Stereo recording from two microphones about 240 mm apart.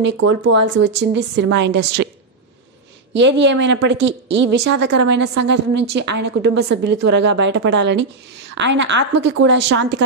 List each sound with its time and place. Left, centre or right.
0.5 s a woman's voice: right
3.1 s a woman's voice: right